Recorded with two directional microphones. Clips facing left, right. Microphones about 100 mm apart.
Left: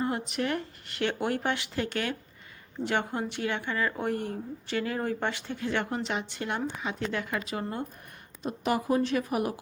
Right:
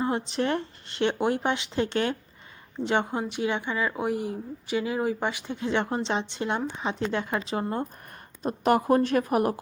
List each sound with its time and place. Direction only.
0.0 s a woman's voice: 25° right (ahead or behind)
8.4 s a woman's voice: 50° right (ahead or behind)